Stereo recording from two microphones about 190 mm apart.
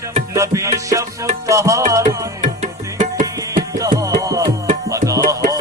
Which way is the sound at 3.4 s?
20° right (ahead or behind).